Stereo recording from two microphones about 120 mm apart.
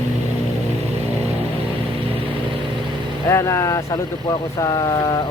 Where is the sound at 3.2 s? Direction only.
25° left (ahead or behind).